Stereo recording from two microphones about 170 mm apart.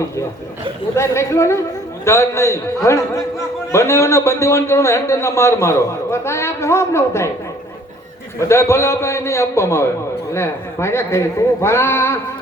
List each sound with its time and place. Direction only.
0.9 s a man's voice: 15° left (ahead or behind)
8.4 s a man's voice: 15° left (ahead or behind)